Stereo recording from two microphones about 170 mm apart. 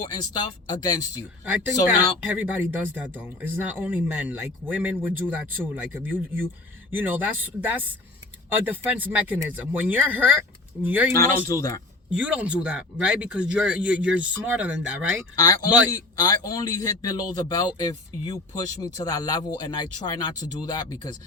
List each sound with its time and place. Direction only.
0.1 s a man's voice: 25° left (ahead or behind)
2.2 s speech: 10° right (ahead or behind)
11.2 s a man's voice: 20° left (ahead or behind)
12.1 s speech: 5° right (ahead or behind)
15.4 s a man's voice: 20° left (ahead or behind)